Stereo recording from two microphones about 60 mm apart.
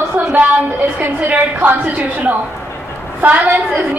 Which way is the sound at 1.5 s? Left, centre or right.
Right.